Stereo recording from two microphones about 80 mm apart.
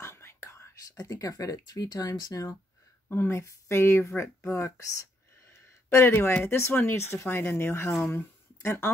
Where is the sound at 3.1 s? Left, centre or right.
Left.